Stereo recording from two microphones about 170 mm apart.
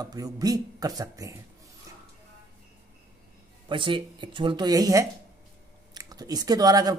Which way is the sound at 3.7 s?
30° right (ahead or behind).